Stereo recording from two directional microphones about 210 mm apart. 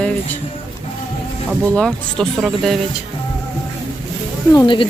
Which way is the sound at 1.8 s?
Centre (ahead or behind).